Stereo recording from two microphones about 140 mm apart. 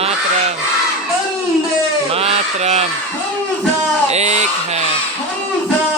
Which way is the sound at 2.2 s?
50° right (ahead or behind).